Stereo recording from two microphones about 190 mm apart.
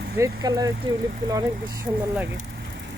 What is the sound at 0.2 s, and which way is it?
Speech, 20° right (ahead or behind).